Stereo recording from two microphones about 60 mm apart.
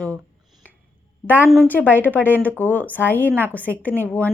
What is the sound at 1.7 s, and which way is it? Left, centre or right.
A woman's voice, left.